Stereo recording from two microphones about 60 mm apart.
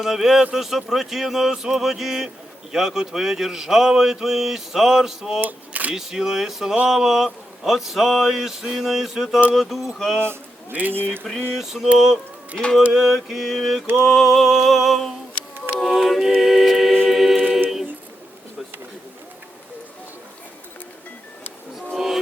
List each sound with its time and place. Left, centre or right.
0.0 s speech: centre
5.4 s speech: right
5.9 s speech: centre
10.2 s a man's voice: right
11.2 s a sound: centre
11.5 s speech: centre
15.8 s a capella: centre
21.9 s music: centre